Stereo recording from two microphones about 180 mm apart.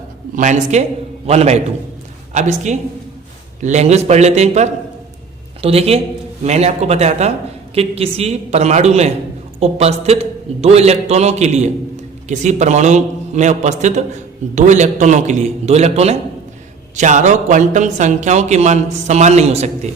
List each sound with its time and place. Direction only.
0.3 s speech: 40° right (ahead or behind)